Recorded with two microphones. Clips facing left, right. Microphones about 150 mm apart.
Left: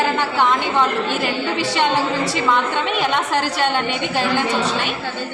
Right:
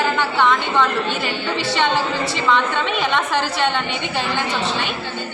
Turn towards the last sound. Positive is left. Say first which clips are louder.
# even
turn(degrees=45)  # may be behind; listen again after turning